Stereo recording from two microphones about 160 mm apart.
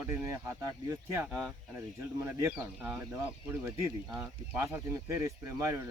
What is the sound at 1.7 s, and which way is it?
Speech, 15° right (ahead or behind).